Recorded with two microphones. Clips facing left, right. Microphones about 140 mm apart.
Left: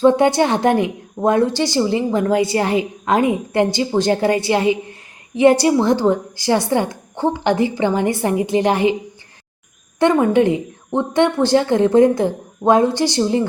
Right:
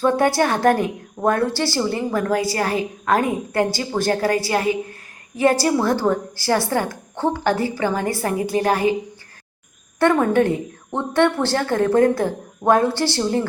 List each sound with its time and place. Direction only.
0.0 s a woman's voice: 20° left (ahead or behind)
10.0 s speech: 20° left (ahead or behind)